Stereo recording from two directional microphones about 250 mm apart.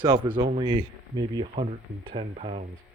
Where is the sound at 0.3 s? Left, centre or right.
Right.